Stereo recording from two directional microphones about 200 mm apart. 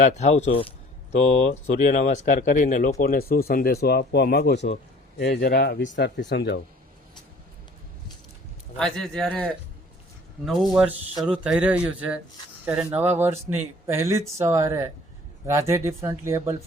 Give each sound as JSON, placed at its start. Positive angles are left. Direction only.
{"t": 0.0, "sound": "speech", "side_deg": 35}
{"t": 8.8, "sound": "speech", "side_deg": 0}
{"t": 11.2, "sound": "speech", "side_deg": -5}